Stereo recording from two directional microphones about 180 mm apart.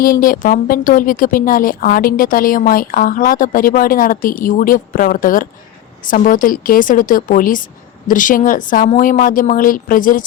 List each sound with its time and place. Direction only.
0.0 s a woman's voice: 50° left (ahead or behind)